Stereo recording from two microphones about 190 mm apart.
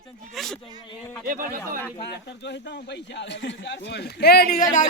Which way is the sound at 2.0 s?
65° left (ahead or behind).